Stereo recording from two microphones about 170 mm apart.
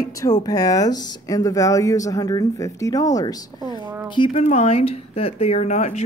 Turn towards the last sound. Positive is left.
turn(degrees=40)  # may be behind; listen again after turning